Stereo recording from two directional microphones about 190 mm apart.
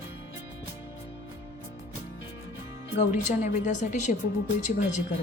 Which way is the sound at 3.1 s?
40° left (ahead or behind).